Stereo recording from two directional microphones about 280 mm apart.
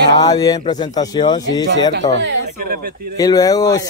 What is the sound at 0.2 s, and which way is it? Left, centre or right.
Speech, centre.